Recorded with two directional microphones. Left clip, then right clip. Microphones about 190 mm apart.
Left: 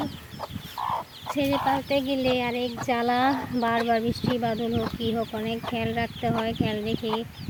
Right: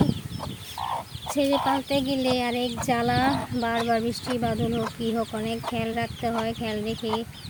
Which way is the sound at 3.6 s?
5° left (ahead or behind).